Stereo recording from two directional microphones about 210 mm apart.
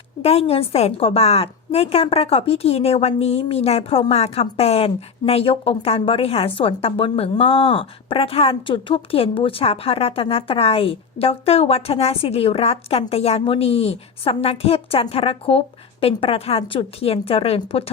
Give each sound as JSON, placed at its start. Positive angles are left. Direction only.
{"t": 0.2, "sound": "a woman's voice", "side_deg": 30}